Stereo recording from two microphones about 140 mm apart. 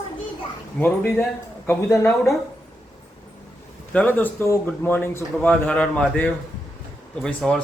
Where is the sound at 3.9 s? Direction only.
10° left (ahead or behind).